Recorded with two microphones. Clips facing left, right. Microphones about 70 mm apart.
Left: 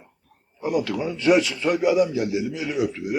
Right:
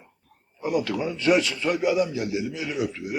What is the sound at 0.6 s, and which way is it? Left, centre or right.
A man's voice, centre.